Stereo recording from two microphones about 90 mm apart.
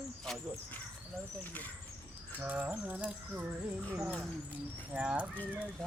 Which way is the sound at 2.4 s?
15° right (ahead or behind).